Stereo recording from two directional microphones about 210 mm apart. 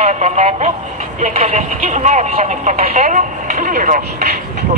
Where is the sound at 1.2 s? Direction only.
35° right (ahead or behind).